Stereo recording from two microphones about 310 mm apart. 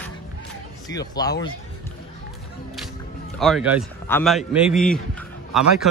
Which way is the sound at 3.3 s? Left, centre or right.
Centre.